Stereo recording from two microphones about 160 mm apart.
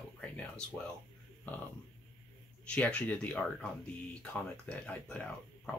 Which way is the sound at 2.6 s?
5° left (ahead or behind).